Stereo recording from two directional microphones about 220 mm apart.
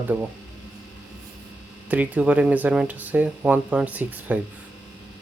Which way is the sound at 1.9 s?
5° right (ahead or behind).